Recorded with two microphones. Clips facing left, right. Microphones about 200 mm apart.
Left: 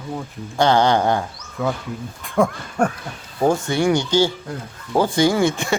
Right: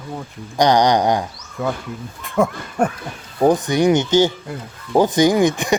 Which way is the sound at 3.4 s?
20° right (ahead or behind).